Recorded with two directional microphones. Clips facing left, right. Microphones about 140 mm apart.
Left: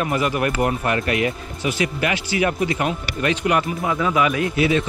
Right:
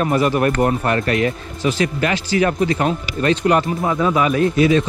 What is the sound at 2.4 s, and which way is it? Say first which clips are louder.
Speech: right 4 dB; 35° right (ahead or behind).